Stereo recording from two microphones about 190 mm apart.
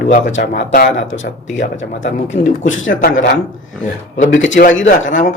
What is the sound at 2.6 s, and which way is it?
Speech, 90° left.